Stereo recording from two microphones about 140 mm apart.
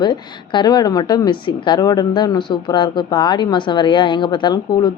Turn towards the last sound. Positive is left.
turn(degrees=30)  # may be behind; listen again after turning